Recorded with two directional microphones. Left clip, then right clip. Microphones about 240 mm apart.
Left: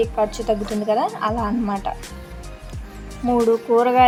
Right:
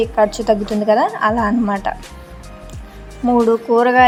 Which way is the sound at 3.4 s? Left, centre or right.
Centre.